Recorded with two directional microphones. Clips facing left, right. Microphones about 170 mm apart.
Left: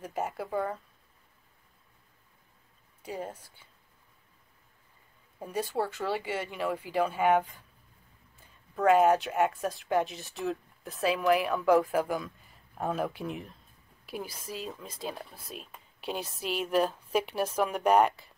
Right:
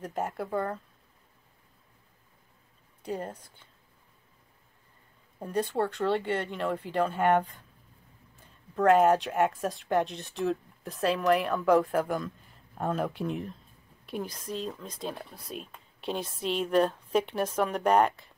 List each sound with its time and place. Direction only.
0.0 s speech: centre (ahead or behind)
3.0 s speech: 5° left (ahead or behind)
5.4 s speech: 5° left (ahead or behind)
8.7 s speech: centre (ahead or behind)